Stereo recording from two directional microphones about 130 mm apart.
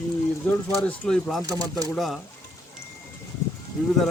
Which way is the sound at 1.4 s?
30° right (ahead or behind).